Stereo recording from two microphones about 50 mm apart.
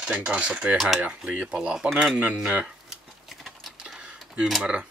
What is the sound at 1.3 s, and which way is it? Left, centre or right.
Speech, right.